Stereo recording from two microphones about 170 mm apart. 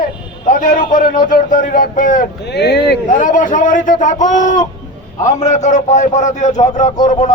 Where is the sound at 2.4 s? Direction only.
85° left.